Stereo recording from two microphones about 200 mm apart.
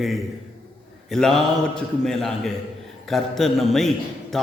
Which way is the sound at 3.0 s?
Centre (ahead or behind).